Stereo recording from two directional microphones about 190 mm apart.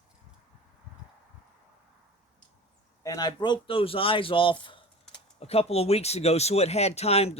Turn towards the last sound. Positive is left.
turn(degrees=35)  # may be behind; listen again after turning